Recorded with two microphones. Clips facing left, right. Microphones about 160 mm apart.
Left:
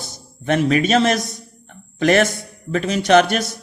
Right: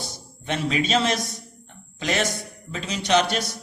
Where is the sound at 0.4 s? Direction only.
55° left (ahead or behind).